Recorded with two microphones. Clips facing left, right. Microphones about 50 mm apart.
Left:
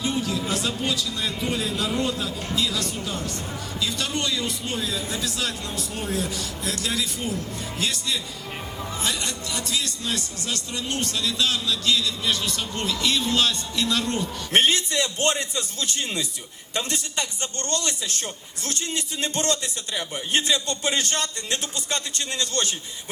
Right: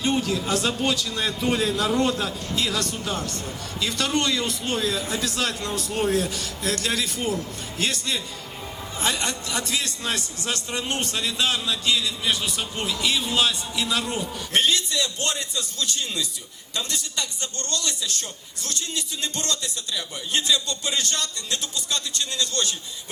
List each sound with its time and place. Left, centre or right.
0.0 s a man's voice: right; by 14.3 s centre
14.5 s a man's voice: left